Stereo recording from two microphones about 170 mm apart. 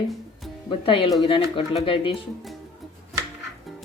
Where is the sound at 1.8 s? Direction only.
30° left (ahead or behind).